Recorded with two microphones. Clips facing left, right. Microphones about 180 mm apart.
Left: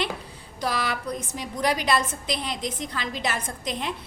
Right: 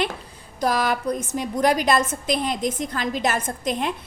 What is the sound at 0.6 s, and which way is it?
A woman's voice, 45° right (ahead or behind).